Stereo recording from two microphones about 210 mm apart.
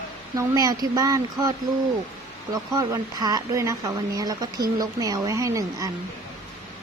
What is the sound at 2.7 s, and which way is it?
Speech, 15° right (ahead or behind).